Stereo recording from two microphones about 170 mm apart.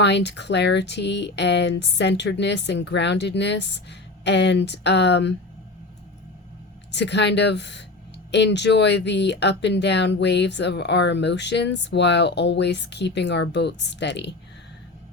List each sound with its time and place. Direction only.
0.0 s speech: 90° left
6.9 s speech: 90° left